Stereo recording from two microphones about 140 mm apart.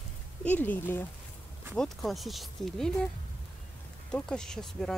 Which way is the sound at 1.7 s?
Centre (ahead or behind).